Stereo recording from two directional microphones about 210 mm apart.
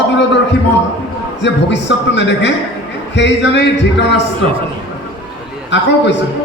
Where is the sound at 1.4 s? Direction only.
55° left (ahead or behind).